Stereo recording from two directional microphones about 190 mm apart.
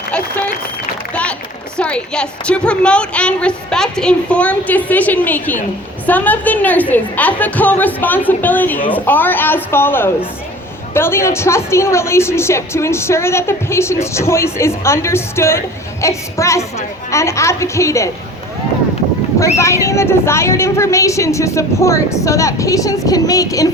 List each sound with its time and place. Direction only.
1.1 s a woman's voice: 5° left (ahead or behind)
19.5 s a woman's voice: 15° left (ahead or behind)